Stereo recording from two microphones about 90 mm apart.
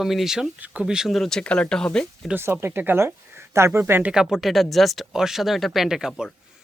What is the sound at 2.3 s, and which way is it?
Speech, 25° right (ahead or behind).